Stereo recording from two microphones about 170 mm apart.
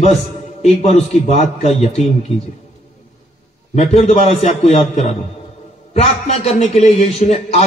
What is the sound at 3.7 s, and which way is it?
A man's voice, 40° left (ahead or behind).